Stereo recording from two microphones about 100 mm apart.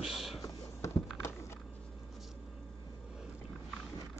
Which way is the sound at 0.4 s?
35° left (ahead or behind).